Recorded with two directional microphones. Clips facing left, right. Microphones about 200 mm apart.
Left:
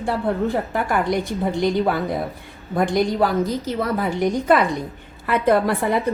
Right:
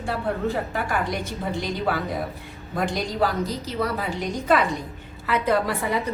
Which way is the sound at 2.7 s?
55° left (ahead or behind).